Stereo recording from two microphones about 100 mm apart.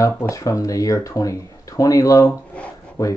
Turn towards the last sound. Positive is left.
turn(degrees=30)  # may be behind; listen again after turning